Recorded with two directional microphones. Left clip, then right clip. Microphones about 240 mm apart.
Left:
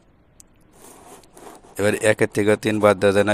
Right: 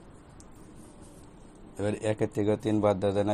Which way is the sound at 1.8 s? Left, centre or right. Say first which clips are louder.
Left 11 dB; left.